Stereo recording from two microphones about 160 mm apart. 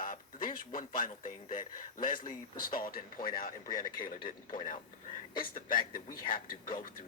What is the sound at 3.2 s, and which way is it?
Speech, 30° left (ahead or behind).